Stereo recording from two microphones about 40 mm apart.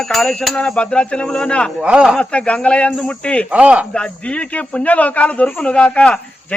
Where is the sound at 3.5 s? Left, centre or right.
Right.